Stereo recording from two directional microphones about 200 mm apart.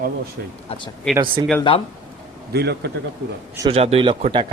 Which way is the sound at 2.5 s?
55° right (ahead or behind).